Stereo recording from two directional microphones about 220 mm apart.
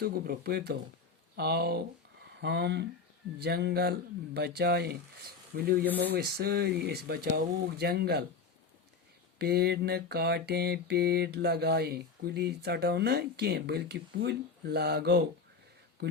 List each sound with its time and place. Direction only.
0.0 s mantra: 45° right (ahead or behind)
9.4 s mantra: 45° right (ahead or behind)